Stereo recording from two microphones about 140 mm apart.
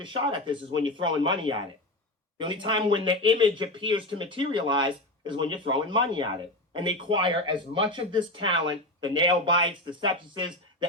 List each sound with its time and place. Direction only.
0.0 s speech: 35° right (ahead or behind)